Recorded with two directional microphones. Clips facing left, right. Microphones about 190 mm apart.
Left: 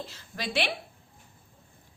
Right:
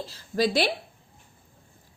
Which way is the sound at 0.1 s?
35° right (ahead or behind).